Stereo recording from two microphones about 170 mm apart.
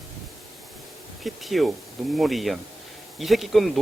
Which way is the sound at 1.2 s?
Centre (ahead or behind).